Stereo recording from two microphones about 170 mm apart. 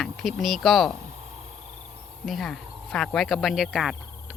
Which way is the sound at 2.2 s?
Centre (ahead or behind).